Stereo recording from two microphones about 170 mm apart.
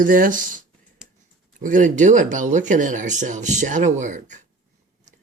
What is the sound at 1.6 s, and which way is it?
Speech, 50° right (ahead or behind).